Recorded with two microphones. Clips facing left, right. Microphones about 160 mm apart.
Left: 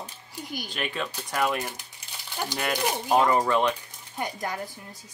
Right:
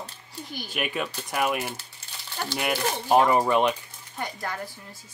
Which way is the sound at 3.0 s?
20° right (ahead or behind).